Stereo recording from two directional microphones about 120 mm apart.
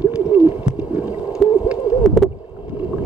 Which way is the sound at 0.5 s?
10° right (ahead or behind).